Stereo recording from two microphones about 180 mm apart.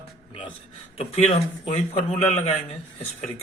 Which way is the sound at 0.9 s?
35° left (ahead or behind).